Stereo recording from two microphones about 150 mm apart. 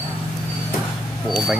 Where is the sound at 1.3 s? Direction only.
5° right (ahead or behind).